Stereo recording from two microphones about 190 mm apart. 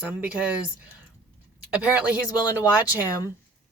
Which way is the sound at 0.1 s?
10° right (ahead or behind).